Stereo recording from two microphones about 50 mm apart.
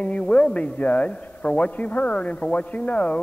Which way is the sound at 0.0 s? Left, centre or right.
Left.